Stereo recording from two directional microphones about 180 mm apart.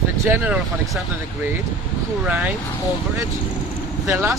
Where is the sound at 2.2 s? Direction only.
5° right (ahead or behind).